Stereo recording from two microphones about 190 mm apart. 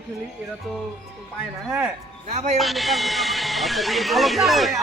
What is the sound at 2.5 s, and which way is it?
A man's voice, centre (ahead or behind).